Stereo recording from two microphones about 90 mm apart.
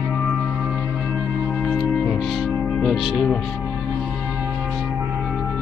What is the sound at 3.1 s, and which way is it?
Speech, 10° left (ahead or behind).